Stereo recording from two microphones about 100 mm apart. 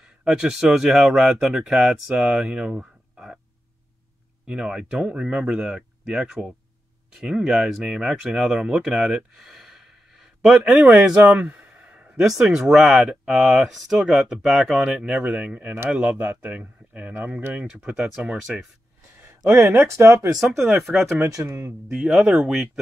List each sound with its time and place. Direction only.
0.2 s speech: 5° right (ahead or behind)
4.5 s speech: 5° right (ahead or behind)
17.8 s speech: 5° right (ahead or behind)
19.5 s speech: 25° right (ahead or behind)
20.3 s speech: 5° right (ahead or behind)
21.3 s speech: 30° right (ahead or behind)
21.8 s speech: 5° right (ahead or behind)